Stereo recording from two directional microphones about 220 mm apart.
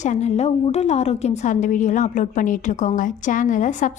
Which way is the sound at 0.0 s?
30° left (ahead or behind).